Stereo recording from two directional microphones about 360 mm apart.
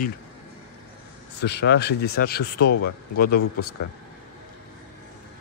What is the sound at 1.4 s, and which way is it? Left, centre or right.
Speech, left.